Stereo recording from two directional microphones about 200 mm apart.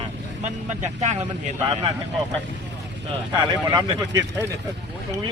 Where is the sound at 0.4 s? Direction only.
35° right (ahead or behind).